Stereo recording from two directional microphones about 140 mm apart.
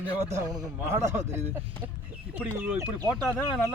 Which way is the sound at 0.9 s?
20° right (ahead or behind).